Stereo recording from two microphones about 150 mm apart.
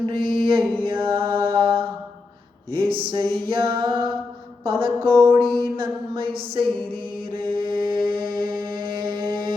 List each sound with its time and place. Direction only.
0.0 s mantra: 35° right (ahead or behind)
2.7 s music: 35° right (ahead or behind)
7.3 s mantra: 35° right (ahead or behind)
8.4 s music: 30° right (ahead or behind)